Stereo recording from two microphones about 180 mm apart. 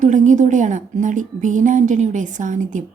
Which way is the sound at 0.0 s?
45° right (ahead or behind).